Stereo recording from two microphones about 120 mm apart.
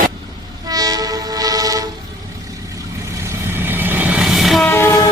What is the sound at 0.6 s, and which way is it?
Train, 30° right (ahead or behind).